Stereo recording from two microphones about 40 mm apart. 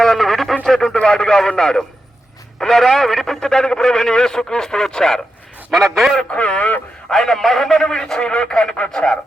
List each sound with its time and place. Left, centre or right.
0.0 s radio: centre
1.0 s speech: centre
5.7 s a man's voice: centre
6.3 s speech: left
7.1 s speech: centre